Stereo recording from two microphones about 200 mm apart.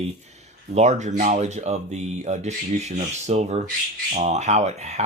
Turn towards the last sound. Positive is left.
turn(degrees=-35)  # may be behind; listen again after turning